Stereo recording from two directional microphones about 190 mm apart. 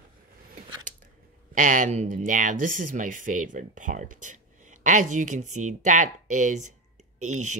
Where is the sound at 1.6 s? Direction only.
45° right (ahead or behind).